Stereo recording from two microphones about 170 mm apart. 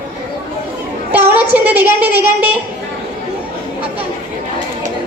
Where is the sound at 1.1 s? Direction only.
10° right (ahead or behind).